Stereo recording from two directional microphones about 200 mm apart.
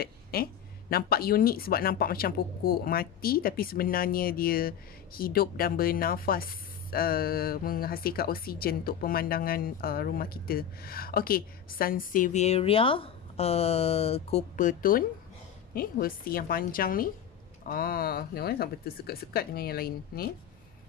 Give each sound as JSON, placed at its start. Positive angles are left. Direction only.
{"t": 0.0, "sound": "speech", "side_deg": 50}